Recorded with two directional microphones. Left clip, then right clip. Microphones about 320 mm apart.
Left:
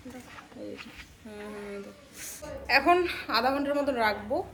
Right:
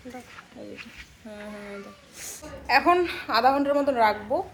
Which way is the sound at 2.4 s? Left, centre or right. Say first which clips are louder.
Right 3 dB; centre.